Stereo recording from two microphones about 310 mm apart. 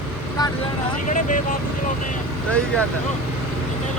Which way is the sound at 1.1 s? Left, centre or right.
Left.